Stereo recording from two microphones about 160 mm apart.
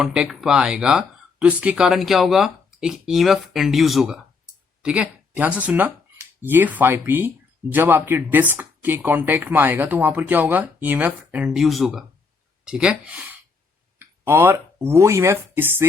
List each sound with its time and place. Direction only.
0.0 s speech: 5° right (ahead or behind)